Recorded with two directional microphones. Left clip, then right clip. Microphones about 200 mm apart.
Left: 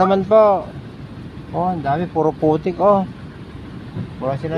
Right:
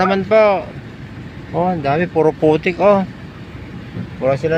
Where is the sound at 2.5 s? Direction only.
5° right (ahead or behind).